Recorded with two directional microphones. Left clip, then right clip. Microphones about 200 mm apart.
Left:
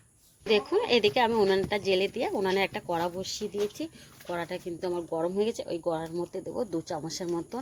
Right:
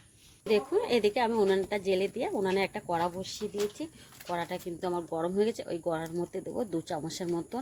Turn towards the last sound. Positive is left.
turn(degrees=-5)  # may be behind; listen again after turning